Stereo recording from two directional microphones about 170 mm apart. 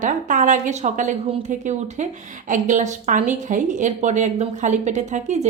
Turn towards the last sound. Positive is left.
turn(degrees=-45)  # may be behind; listen again after turning